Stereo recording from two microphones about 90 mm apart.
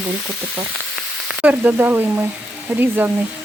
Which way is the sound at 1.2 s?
20° right (ahead or behind).